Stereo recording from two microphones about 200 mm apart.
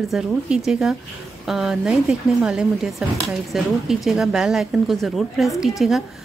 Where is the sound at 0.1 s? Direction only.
Centre (ahead or behind).